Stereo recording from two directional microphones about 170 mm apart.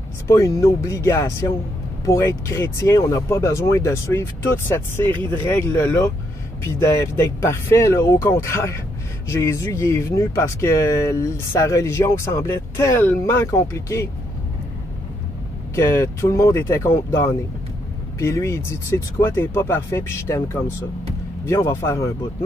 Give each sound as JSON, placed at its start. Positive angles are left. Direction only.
{"t": 0.3, "sound": "speech", "side_deg": 20}
{"t": 7.4, "sound": "speech", "side_deg": 15}
{"t": 15.7, "sound": "speech", "side_deg": 15}